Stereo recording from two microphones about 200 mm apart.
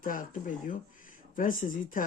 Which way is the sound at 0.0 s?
45° left (ahead or behind).